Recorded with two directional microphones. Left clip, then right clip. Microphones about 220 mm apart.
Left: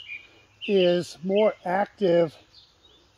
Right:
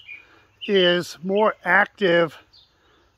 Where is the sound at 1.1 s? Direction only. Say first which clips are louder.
Right 1 dB; 25° right (ahead or behind).